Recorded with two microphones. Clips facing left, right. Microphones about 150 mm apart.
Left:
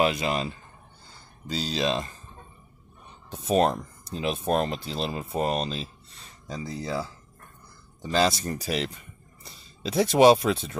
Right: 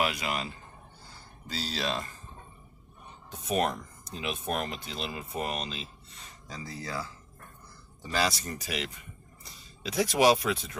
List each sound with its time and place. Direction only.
0.0 s speech: 25° left (ahead or behind)
1.5 s speech: 20° left (ahead or behind)
3.3 s speech: 30° left (ahead or behind)
6.5 s speech: 20° left (ahead or behind)